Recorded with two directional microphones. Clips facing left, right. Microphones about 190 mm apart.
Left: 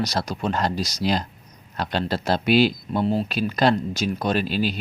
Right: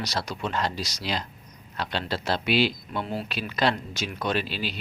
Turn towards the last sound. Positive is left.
turn(degrees=45)  # may be behind; listen again after turning